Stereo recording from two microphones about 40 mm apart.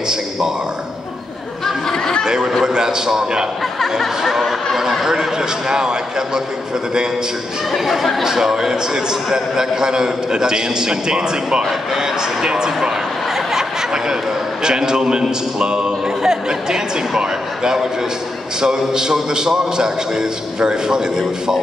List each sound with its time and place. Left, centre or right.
1.9 s a sound: centre
2.2 s a man's voice: centre
4.2 s a man's voice: centre
7.7 s a man's voice: centre
13.5 s a sound: centre
14.6 s a man's voice: centre